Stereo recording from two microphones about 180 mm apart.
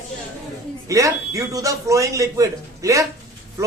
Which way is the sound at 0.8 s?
20° right (ahead or behind).